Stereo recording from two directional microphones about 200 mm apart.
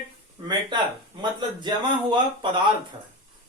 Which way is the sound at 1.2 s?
25° right (ahead or behind).